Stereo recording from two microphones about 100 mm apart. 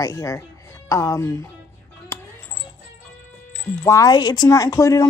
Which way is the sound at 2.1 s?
30° left (ahead or behind).